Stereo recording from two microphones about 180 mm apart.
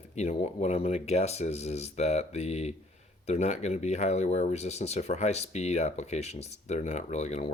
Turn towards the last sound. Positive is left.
turn(degrees=35)  # may be behind; listen again after turning